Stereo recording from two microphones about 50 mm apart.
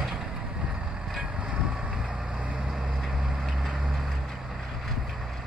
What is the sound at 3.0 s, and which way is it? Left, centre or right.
Vehicle, centre.